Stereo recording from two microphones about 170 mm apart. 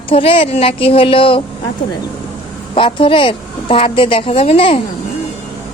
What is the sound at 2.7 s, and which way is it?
A woman's voice, 30° left (ahead or behind).